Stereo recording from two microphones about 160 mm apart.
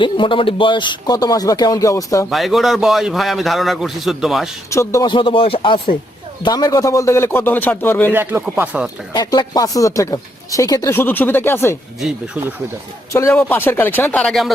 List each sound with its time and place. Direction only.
0.0 s speech: 30° left (ahead or behind)
2.3 s a man's voice: centre (ahead or behind)
4.7 s speech: 20° left (ahead or behind)
5.0 s speech: 30° left (ahead or behind); by 8.1 s 10° left (ahead or behind)
8.1 s speech: 15° right (ahead or behind)
9.1 s speech: 25° left (ahead or behind)
11.9 s a man's voice: 5° right (ahead or behind)
13.1 s speech: 15° left (ahead or behind)